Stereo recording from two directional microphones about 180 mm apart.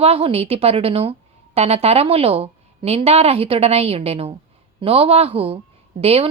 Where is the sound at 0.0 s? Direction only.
35° right (ahead or behind).